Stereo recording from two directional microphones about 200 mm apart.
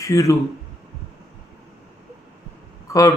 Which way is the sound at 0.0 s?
15° left (ahead or behind).